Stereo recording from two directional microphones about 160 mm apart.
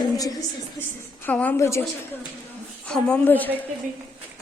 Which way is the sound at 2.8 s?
5° left (ahead or behind).